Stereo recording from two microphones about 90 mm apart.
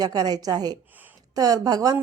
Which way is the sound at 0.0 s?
50° right (ahead or behind).